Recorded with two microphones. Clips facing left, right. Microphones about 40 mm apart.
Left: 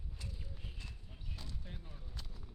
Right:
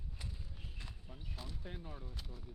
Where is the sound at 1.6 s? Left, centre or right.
Right.